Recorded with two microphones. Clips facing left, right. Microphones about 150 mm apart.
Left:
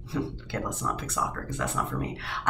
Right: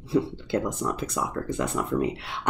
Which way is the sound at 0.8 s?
25° right (ahead or behind).